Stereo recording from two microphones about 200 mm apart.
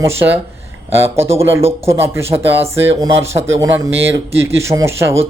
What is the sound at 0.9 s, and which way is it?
Speech, 30° right (ahead or behind).